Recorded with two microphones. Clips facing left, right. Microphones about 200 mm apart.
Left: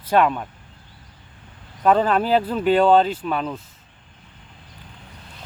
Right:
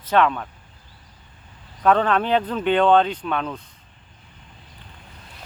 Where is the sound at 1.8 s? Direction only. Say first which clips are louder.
Left 1 dB; 5° left (ahead or behind).